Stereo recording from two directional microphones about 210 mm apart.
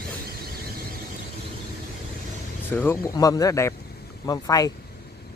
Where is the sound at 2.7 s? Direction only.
10° left (ahead or behind).